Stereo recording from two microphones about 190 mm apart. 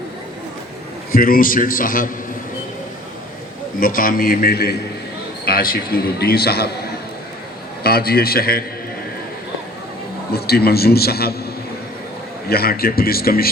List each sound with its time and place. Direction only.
1.1 s a man's voice: 50° left (ahead or behind)
3.8 s a man's voice: 50° left (ahead or behind)
7.9 s a man's voice: 55° left (ahead or behind)
10.3 s a man's voice: 55° left (ahead or behind)
12.5 s a man's voice: 55° left (ahead or behind)